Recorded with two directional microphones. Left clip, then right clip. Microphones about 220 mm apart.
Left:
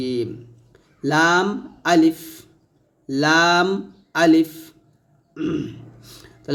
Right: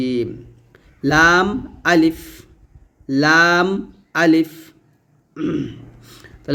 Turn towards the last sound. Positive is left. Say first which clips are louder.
# right 2 dB
turn(degrees=-15)  # may be behind; listen again after turning